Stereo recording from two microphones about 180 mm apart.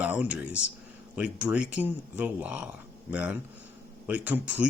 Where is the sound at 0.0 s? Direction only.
10° right (ahead or behind).